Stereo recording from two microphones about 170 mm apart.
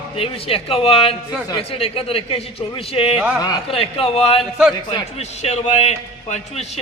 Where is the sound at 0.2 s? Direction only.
35° left (ahead or behind).